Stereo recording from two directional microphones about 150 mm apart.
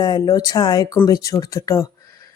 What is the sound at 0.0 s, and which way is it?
Speech, 25° left (ahead or behind).